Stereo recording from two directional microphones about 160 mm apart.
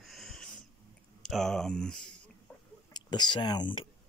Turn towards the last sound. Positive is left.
turn(degrees=30)  # may be behind; listen again after turning